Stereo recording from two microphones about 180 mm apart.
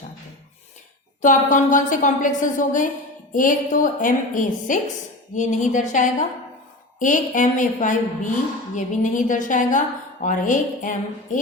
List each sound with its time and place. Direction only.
1.2 s a woman's voice: 45° left (ahead or behind)